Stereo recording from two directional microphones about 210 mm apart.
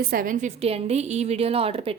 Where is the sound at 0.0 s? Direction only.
45° right (ahead or behind).